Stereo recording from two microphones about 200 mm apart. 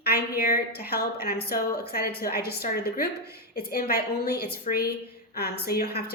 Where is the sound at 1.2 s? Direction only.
50° left (ahead or behind).